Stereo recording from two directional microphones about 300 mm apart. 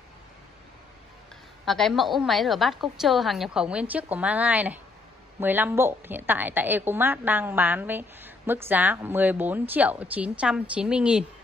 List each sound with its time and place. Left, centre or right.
1.7 s a woman's voice: centre